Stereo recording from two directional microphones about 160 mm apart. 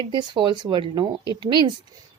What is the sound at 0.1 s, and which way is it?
Speech, 30° right (ahead or behind).